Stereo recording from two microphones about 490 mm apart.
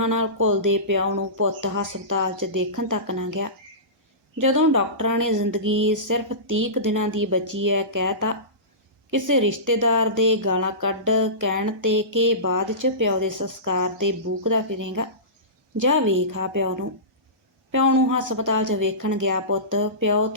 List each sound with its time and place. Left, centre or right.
0.0 s speech: right